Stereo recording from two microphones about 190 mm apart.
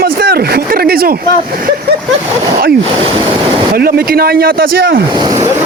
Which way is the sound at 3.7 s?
55° right (ahead or behind).